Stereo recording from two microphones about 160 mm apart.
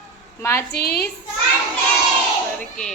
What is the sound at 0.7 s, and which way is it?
Speech, 85° left.